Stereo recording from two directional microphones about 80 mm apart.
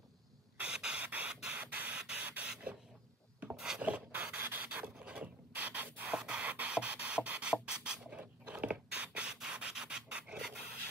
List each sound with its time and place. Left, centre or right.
0.6 s spray: centre
3.5 s filing: centre
3.8 s rub: centre
7.6 s a sound: centre